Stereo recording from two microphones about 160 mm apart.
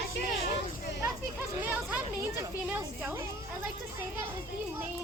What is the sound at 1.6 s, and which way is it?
Speech, 10° right (ahead or behind).